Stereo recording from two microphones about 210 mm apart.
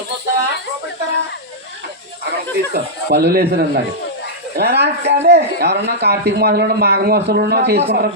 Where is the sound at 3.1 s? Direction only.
50° right (ahead or behind).